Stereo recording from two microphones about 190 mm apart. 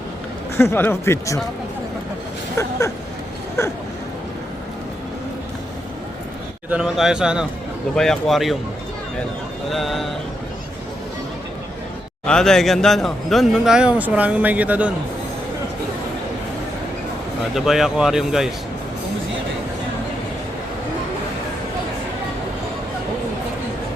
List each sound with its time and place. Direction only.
0.5 s speech: 15° left (ahead or behind)
2.6 s speech: 15° left (ahead or behind)
6.7 s a man's voice: 5° right (ahead or behind)
9.6 s a man's voice: centre (ahead or behind)
12.2 s a man's voice: 5° left (ahead or behind)
17.5 s a man's voice: centre (ahead or behind)